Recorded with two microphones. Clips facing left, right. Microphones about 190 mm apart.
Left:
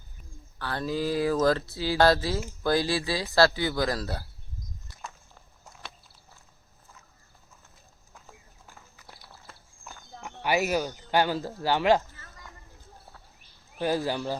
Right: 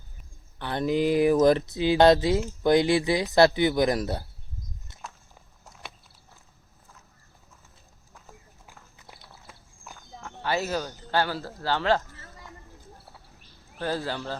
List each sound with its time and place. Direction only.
0.6 s speech: 20° right (ahead or behind)
8.6 s walk: 5° right (ahead or behind)
10.2 s speech: 15° left (ahead or behind)
13.7 s speech: 15° left (ahead or behind)